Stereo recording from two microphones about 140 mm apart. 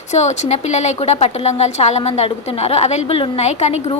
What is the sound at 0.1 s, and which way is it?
A woman's voice, 55° left (ahead or behind).